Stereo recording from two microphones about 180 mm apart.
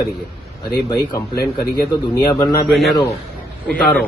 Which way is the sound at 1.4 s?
60° left (ahead or behind).